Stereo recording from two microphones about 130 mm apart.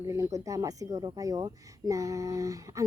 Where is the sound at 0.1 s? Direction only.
25° right (ahead or behind).